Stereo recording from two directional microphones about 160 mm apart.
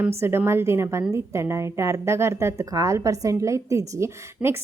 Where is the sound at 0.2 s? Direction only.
15° right (ahead or behind).